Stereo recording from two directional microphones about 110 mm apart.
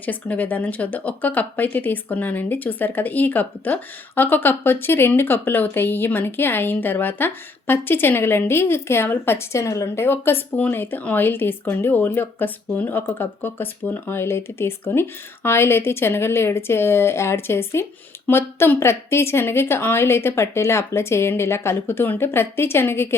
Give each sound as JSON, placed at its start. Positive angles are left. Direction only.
{"t": 0.0, "sound": "speech", "side_deg": 15}